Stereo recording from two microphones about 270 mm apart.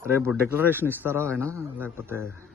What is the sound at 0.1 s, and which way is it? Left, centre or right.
Speech, centre.